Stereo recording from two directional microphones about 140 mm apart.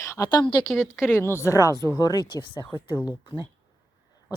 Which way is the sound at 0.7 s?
5° right (ahead or behind).